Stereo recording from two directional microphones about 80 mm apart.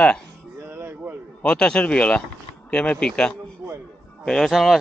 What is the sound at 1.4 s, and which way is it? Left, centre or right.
Speech, centre.